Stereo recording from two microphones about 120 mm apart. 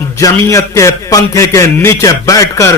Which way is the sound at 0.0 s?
25° left (ahead or behind).